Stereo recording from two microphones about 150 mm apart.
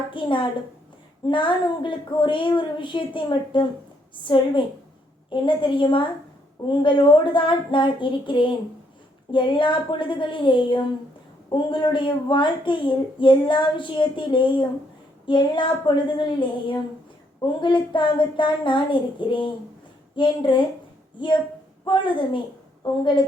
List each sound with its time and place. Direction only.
0.1 s speech: 35° left (ahead or behind)
21.8 s speech: 30° left (ahead or behind)